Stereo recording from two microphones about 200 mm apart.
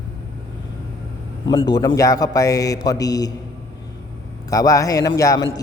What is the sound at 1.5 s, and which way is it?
A man's voice, 20° left (ahead or behind).